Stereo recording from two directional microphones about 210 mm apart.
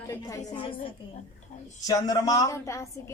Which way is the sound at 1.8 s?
15° left (ahead or behind).